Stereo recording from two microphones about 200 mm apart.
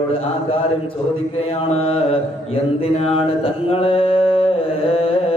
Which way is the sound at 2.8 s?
30° left (ahead or behind).